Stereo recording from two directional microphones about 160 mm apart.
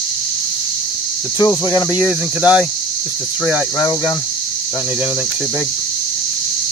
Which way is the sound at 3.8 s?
10° left (ahead or behind).